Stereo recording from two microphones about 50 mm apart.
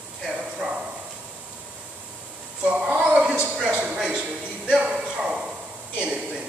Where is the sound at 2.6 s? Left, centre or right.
Right.